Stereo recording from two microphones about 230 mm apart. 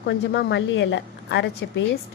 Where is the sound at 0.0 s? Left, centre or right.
Left.